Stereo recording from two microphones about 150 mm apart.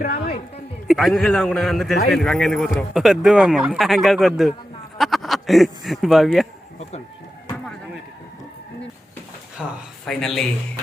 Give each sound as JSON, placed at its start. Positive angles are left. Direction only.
{"t": 0.0, "sound": "a sound", "side_deg": 90}
{"t": 0.9, "sound": "a man's voice", "side_deg": 0}
{"t": 9.6, "sound": "speech", "side_deg": -10}
{"t": 10.1, "sound": "a man's voice", "side_deg": 0}